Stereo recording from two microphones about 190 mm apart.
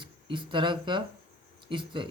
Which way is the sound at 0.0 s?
25° right (ahead or behind).